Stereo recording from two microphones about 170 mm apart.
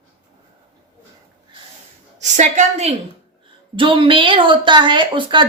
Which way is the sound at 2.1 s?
45° right (ahead or behind).